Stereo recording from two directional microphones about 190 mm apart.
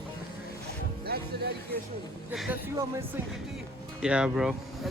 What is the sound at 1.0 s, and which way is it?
Speech, 55° right (ahead or behind).